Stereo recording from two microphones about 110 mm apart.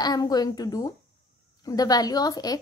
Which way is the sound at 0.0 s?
35° left (ahead or behind).